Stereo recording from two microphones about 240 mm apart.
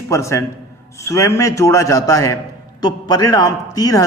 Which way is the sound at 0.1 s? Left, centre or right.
Centre.